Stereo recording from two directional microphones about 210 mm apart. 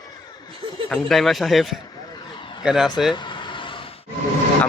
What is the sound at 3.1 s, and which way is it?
Vehicle, 20° left (ahead or behind).